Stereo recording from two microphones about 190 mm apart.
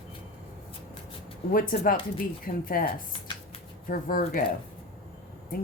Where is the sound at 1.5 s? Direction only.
50° left (ahead or behind).